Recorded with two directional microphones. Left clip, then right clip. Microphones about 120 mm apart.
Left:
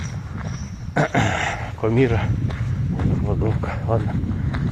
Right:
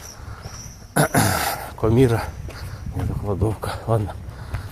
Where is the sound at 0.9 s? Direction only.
30° right (ahead or behind).